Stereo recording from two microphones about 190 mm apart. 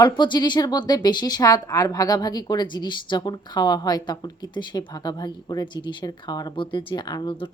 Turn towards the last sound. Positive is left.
turn(degrees=25)  # may be behind; listen again after turning